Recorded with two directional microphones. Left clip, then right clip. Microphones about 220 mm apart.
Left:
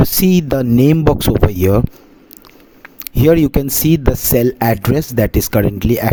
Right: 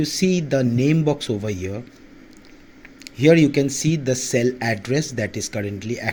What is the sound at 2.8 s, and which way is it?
Speech, 50° left (ahead or behind).